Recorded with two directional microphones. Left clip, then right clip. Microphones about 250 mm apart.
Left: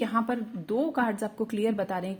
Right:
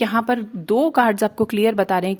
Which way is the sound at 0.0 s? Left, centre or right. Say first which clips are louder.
Right 9 dB; right.